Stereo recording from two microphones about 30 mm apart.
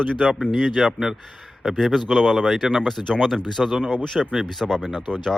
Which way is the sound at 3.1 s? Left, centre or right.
Centre.